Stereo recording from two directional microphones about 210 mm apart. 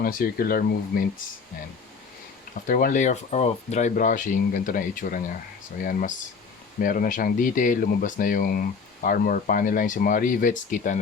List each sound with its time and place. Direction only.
0.0 s speech: 45° left (ahead or behind)
2.6 s speech: 40° left (ahead or behind)